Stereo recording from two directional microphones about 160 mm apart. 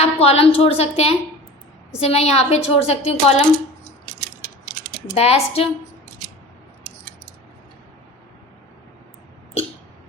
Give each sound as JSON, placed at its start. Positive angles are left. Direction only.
{"t": 0.0, "sound": "a woman's voice", "side_deg": 40}
{"t": 5.1, "sound": "a woman's voice", "side_deg": 40}